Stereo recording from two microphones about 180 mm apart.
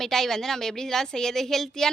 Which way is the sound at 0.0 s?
Centre (ahead or behind).